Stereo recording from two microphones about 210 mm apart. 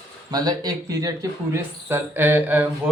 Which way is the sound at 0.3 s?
20° right (ahead or behind).